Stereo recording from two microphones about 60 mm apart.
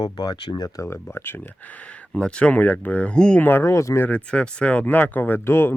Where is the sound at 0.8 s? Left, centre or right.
Left.